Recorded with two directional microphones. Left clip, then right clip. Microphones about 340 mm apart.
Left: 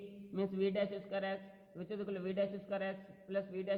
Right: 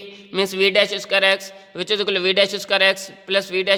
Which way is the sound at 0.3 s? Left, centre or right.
Right.